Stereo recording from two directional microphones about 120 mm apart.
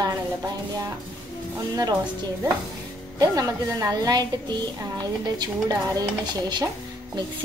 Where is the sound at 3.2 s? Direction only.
30° right (ahead or behind).